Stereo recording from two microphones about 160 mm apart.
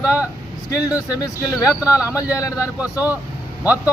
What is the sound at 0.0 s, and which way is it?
Speech, 10° right (ahead or behind).